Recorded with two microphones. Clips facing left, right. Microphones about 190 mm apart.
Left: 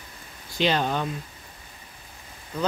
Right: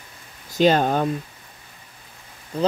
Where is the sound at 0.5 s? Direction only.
45° right (ahead or behind).